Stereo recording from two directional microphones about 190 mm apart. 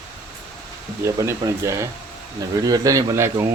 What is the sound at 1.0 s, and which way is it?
Speech, 15° right (ahead or behind).